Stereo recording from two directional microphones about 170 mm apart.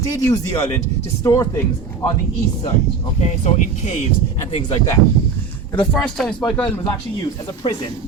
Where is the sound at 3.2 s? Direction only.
40° left (ahead or behind).